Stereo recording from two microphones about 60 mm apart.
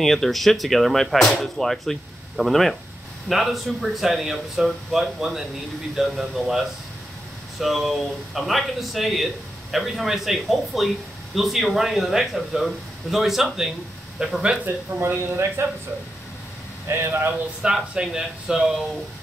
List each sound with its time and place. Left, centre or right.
0.0 s a man's voice: centre
15.0 s a man's voice: right
16.8 s speech: right
17.6 s speech: centre